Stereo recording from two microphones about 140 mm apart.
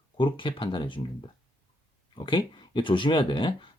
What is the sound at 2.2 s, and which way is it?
Speech, 35° left (ahead or behind).